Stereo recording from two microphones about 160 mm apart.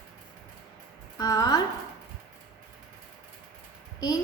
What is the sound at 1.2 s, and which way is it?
Speech, 25° left (ahead or behind).